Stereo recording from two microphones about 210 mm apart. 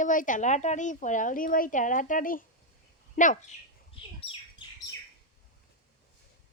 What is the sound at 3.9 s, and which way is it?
Bird, 25° left (ahead or behind).